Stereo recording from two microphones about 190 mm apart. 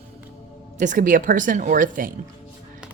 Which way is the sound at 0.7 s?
45° right (ahead or behind).